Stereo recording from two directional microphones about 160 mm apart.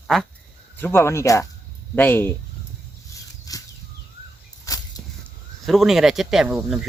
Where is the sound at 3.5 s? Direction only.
20° left (ahead or behind).